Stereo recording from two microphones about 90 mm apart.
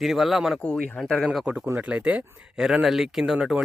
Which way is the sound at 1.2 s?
Centre (ahead or behind).